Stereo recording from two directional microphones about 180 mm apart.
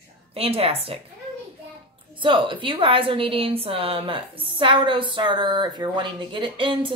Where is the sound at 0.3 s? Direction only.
35° right (ahead or behind).